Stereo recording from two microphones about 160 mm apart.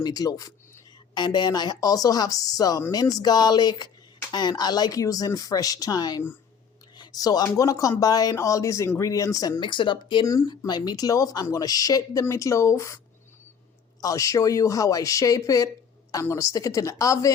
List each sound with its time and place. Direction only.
0.0 s speech: 25° left (ahead or behind)
14.0 s speech: 20° left (ahead or behind)